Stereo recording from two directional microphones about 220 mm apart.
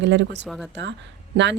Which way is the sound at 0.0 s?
55° right (ahead or behind).